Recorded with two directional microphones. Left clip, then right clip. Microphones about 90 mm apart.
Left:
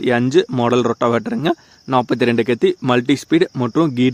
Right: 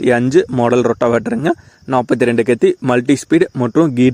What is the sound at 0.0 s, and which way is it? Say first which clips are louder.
Speech: right 3 dB; 35° right (ahead or behind).